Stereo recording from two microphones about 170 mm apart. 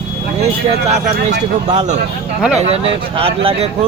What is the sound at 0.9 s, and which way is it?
Speech, 40° right (ahead or behind).